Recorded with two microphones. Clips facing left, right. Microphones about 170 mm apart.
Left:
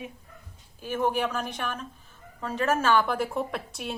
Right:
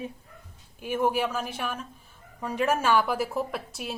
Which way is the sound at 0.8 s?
10° right (ahead or behind).